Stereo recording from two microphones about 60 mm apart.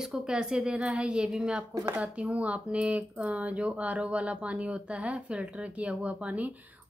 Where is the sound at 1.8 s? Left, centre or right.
Right.